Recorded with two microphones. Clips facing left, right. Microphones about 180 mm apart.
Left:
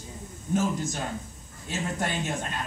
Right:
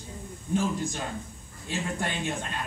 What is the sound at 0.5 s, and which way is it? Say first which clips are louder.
Speech: left 1 dB; 45° left (ahead or behind).